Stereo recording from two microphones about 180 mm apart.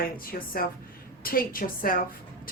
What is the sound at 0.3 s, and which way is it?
Speech, 55° left (ahead or behind).